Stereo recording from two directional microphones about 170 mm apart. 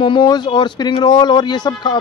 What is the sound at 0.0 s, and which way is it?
Speech, 25° left (ahead or behind).